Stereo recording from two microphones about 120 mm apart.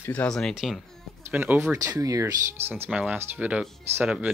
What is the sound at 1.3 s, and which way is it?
Speech, 15° right (ahead or behind).